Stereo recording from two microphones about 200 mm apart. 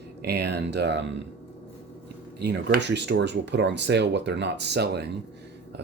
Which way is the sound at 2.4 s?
55° right (ahead or behind).